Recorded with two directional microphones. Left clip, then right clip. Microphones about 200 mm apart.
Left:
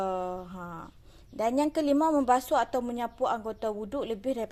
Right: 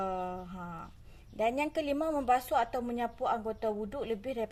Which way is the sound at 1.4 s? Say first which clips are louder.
Left 4 dB; 30° left (ahead or behind).